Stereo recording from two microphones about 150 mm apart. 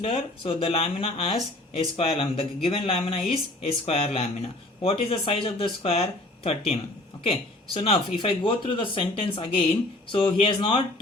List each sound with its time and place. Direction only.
0.4 s speech: 40° left (ahead or behind)